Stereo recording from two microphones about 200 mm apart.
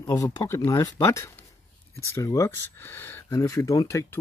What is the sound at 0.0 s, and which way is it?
Speech, 15° left (ahead or behind).